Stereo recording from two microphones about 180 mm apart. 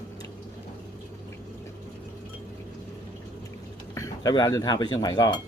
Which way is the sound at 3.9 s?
20° left (ahead or behind).